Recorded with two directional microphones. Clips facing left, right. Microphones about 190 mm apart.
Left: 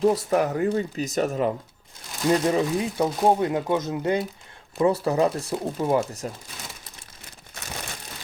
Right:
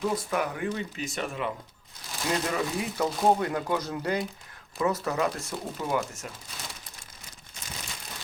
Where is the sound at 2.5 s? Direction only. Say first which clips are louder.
Left 7 dB; 25° left (ahead or behind).